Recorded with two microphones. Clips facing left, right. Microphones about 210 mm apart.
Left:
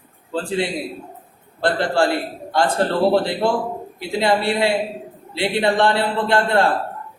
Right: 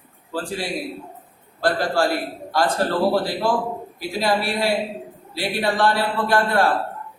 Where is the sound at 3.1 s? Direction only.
25° left (ahead or behind).